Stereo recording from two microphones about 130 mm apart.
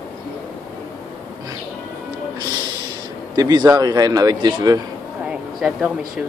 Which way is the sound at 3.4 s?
30° right (ahead or behind).